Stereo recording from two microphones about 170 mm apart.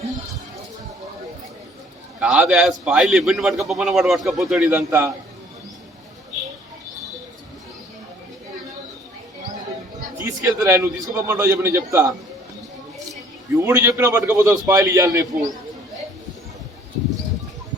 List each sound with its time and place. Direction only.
2.2 s a man's voice: 5° right (ahead or behind)
10.2 s a man's voice: 15° right (ahead or behind)
13.6 s a man's voice: 15° right (ahead or behind)